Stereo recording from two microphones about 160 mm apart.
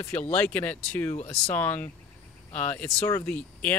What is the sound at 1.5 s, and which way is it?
Speech, 10° left (ahead or behind).